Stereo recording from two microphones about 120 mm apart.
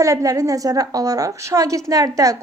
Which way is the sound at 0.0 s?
30° right (ahead or behind).